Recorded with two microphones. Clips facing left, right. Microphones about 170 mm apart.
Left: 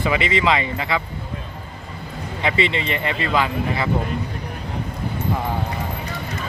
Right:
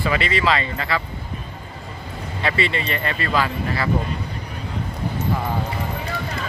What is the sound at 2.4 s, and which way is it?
Speech, 20° left (ahead or behind).